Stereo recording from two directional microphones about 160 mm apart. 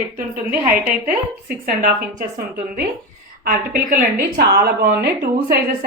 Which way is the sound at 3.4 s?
60° right (ahead or behind).